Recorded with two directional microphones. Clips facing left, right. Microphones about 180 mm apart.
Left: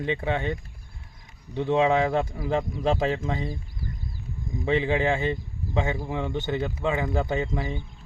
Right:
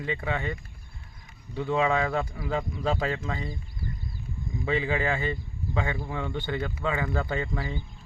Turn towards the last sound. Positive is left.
turn(degrees=20)  # may be behind; listen again after turning